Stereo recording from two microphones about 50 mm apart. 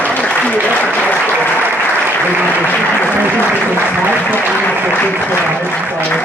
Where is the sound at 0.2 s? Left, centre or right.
Left.